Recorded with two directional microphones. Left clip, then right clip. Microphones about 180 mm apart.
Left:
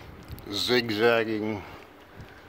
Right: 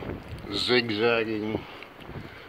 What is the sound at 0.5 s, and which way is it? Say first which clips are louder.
Speech: right 1 dB; 15° left (ahead or behind).